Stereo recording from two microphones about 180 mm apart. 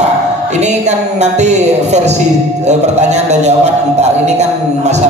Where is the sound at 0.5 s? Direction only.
40° right (ahead or behind).